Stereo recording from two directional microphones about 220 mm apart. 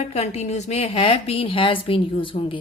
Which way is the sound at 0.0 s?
30° left (ahead or behind).